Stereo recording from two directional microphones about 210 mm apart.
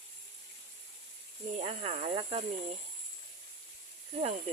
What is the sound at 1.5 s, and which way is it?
Speech, 30° right (ahead or behind).